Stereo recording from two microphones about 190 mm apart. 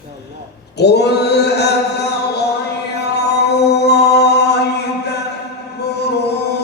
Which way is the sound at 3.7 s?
60° left (ahead or behind).